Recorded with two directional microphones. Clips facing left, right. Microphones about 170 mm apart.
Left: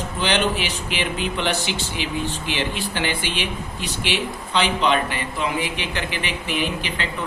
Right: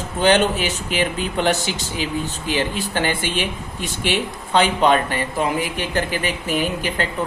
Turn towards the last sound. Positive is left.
turn(degrees=-45)  # may be behind; listen again after turning